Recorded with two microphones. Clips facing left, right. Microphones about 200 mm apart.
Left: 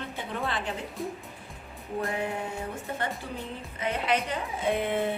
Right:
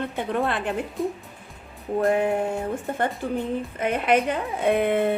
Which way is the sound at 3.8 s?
55° right (ahead or behind).